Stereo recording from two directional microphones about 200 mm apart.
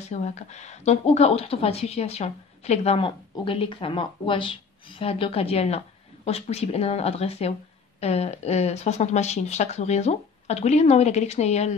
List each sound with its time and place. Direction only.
0.1 s a woman's voice: 35° left (ahead or behind)